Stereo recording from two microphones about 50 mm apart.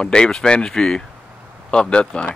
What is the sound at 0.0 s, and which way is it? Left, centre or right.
Speech, centre.